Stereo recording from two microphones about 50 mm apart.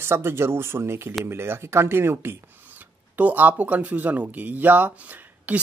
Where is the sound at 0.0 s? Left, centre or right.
Right.